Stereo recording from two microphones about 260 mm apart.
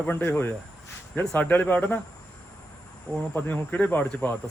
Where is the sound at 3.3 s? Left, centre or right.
Centre.